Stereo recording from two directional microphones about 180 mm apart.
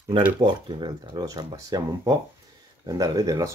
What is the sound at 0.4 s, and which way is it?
Speech, 25° right (ahead or behind).